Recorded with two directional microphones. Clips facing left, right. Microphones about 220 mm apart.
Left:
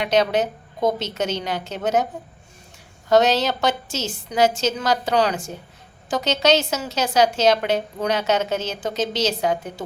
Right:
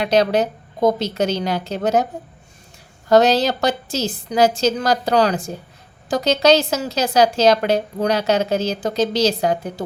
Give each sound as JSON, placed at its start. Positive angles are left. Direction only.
{"t": 0.0, "sound": "a woman's voice", "side_deg": -35}
{"t": 3.1, "sound": "a woman's voice", "side_deg": -35}